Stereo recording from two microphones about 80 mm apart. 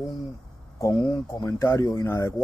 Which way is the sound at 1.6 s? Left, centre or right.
Left.